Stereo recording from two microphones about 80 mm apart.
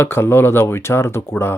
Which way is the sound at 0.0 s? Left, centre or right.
Left.